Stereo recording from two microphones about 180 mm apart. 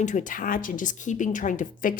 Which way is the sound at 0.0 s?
45° left (ahead or behind).